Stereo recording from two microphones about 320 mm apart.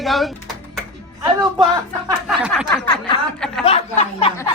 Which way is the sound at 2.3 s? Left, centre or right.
Centre.